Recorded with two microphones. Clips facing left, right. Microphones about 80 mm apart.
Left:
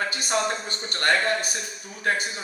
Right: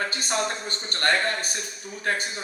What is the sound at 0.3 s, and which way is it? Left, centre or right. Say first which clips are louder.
A man's voice: left 3 dB; right.